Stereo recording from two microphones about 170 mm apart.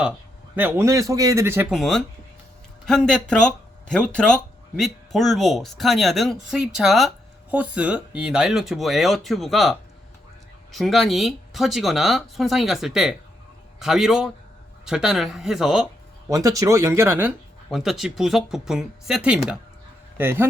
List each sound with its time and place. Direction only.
0.5 s a man's voice: 15° right (ahead or behind)
1.7 s speech: centre (ahead or behind)
16.3 s a man's voice: 20° right (ahead or behind)
17.7 s a man's voice: centre (ahead or behind)